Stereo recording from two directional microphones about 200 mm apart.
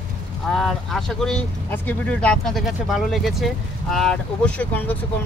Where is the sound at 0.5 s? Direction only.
Centre (ahead or behind).